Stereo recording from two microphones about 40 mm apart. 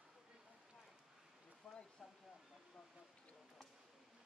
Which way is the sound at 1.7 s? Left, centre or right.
Left.